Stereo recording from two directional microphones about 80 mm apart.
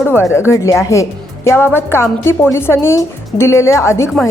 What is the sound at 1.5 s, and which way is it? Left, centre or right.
A woman's voice, left.